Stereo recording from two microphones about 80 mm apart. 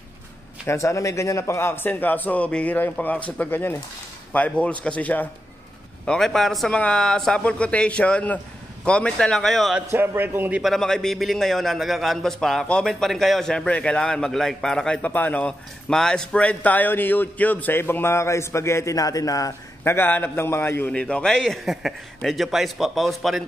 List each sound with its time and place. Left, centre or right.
0.7 s a man's voice: left; by 3.4 s centre
3.4 s a man's voice: left
6.0 s a man's voice: centre
9.9 s a man's voice: right
10.6 s a man's voice: centre
15.9 s a man's voice: centre; by 19.5 s left
19.8 s a man's voice: left
20.9 s a man's voice: centre